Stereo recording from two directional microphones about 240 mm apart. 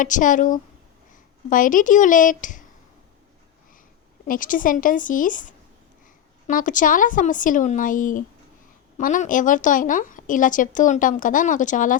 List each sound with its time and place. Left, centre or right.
0.0 s a woman's voice: left
4.3 s a woman's voice: left